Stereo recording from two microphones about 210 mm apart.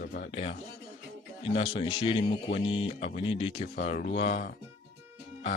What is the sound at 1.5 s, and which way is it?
Speech, 25° left (ahead or behind).